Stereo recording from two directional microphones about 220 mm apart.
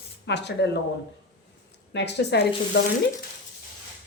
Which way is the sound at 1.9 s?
50° left (ahead or behind).